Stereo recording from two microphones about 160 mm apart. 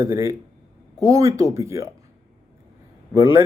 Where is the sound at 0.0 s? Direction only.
20° right (ahead or behind).